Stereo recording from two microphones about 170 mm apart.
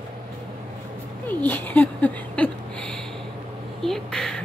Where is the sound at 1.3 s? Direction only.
10° left (ahead or behind).